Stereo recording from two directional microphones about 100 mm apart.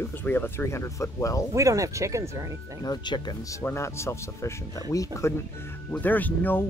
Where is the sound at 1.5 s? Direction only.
35° right (ahead or behind).